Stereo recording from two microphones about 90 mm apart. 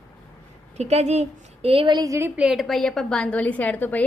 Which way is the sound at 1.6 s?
90° right.